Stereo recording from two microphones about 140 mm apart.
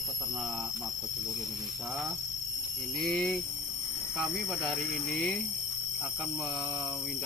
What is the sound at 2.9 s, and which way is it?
Speech, 5° left (ahead or behind).